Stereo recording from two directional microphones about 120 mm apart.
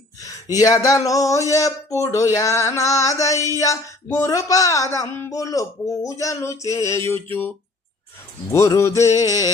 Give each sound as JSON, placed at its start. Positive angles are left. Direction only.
{"t": 0.5, "sound": "speech", "side_deg": 30}
{"t": 8.4, "sound": "speech", "side_deg": 25}